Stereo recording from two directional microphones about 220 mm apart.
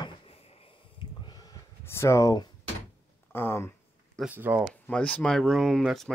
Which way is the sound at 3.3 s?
10° left (ahead or behind).